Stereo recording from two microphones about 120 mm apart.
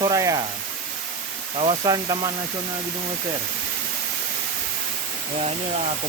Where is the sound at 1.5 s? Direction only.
50° right (ahead or behind).